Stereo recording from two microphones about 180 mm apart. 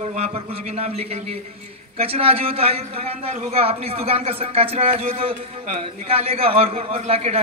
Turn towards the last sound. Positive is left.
turn(degrees=-35)  # may be behind; listen again after turning